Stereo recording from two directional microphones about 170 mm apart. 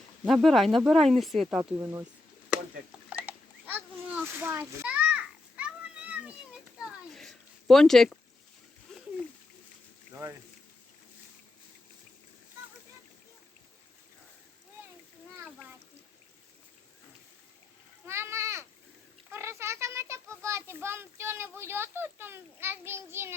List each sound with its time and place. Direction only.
0.4 s speech: centre (ahead or behind)
1.8 s speech: 15° right (ahead or behind)
3.1 s a sound: 10° right (ahead or behind)
8.9 s splash: 5° left (ahead or behind)
18.0 s a sound: 15° right (ahead or behind)
19.3 s a child's voice: 15° right (ahead or behind)